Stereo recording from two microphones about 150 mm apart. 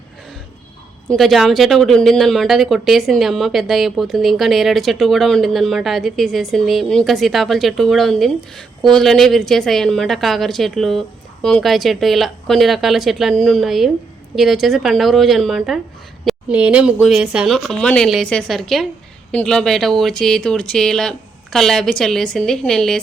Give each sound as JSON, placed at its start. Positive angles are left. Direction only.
{"t": 1.1, "sound": "speech", "side_deg": 0}